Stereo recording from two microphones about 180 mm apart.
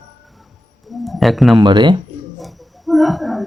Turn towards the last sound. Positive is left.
turn(degrees=0)  # may be behind; listen again after turning